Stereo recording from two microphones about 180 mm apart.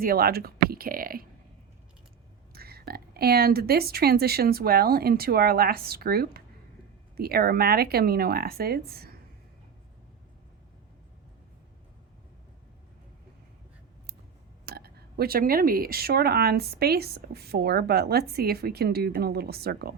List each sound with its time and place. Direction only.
0.0 s speech: 55° right (ahead or behind)
2.5 s speech: 60° right (ahead or behind)
14.6 s speech: 60° right (ahead or behind)